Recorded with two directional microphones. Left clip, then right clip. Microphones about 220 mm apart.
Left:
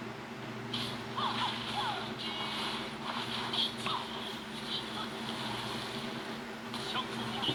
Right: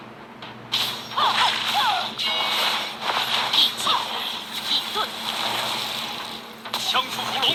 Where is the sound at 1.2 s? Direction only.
50° right (ahead or behind).